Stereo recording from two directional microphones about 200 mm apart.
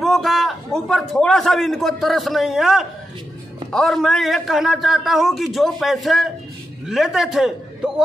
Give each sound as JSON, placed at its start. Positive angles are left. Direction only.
{"t": 0.0, "sound": "a man's voice", "side_deg": 0}